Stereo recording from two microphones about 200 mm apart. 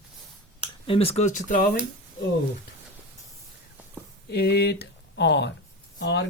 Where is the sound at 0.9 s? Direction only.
30° left (ahead or behind).